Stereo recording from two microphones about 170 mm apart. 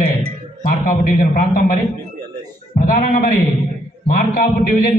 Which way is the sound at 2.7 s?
55° left (ahead or behind).